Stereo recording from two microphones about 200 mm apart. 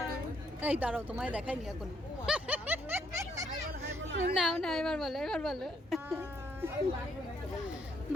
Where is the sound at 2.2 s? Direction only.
5° right (ahead or behind).